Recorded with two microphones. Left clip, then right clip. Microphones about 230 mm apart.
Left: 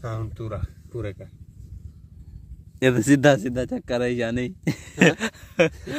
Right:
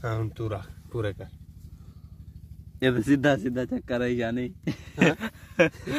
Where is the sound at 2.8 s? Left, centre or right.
Left.